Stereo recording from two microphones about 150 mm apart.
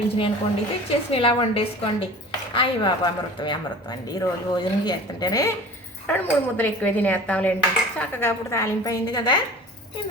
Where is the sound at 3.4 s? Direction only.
30° left (ahead or behind).